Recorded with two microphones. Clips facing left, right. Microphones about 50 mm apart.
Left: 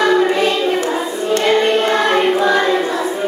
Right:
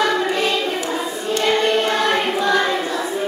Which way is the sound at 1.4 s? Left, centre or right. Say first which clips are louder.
Left 3 dB; centre.